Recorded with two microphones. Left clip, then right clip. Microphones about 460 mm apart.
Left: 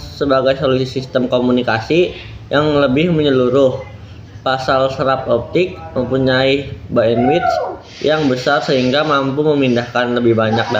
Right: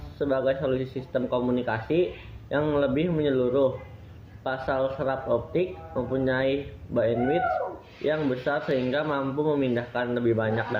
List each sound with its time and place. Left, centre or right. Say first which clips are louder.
0.2 s speech: left 11 dB; right